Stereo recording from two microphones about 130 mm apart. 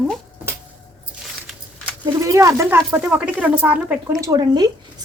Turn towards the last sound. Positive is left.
turn(degrees=-35)  # may be behind; listen again after turning